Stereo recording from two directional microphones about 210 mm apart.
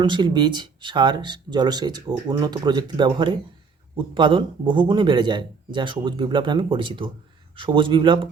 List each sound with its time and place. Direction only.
0.0 s speech: 20° right (ahead or behind)